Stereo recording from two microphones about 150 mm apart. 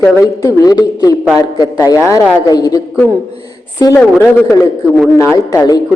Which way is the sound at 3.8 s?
20° left (ahead or behind).